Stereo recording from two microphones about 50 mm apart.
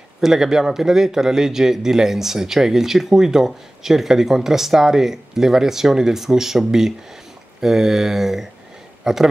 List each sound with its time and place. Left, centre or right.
0.2 s a man's voice: centre